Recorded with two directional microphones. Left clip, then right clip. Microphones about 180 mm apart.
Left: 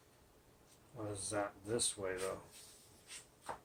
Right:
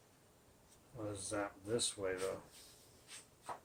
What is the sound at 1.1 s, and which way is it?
Speech, 10° right (ahead or behind).